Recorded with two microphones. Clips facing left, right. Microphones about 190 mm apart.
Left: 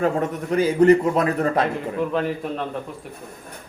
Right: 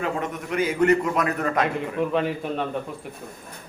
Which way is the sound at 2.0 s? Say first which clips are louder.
Even; centre (ahead or behind).